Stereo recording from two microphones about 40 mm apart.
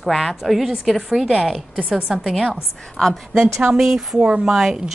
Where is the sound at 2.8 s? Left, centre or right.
Centre.